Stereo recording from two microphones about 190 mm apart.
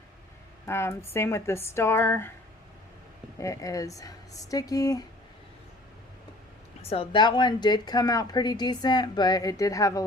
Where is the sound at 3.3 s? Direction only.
15° left (ahead or behind).